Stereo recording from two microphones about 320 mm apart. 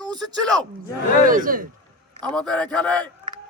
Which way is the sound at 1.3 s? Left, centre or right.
Right.